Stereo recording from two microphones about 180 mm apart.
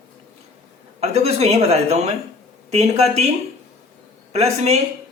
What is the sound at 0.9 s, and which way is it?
A man's voice, 35° right (ahead or behind).